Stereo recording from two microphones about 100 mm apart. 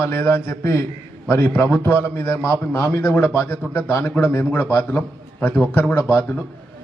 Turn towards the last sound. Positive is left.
turn(degrees=25)  # may be behind; listen again after turning